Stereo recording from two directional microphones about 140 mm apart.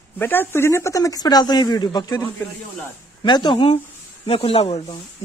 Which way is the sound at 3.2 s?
35° left (ahead or behind).